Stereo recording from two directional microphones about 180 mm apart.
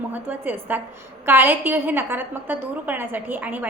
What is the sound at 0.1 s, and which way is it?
A woman's voice, 10° right (ahead or behind).